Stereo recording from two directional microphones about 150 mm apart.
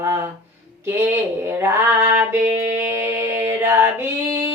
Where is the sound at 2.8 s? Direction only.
15° right (ahead or behind).